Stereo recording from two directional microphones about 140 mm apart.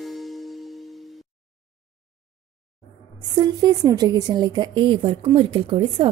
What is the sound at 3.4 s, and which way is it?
A woman's voice, 30° right (ahead or behind).